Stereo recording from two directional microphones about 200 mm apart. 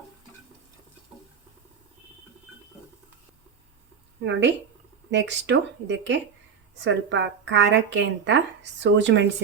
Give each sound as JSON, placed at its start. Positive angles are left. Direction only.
{"t": 4.2, "sound": "a woman's voice", "side_deg": -60}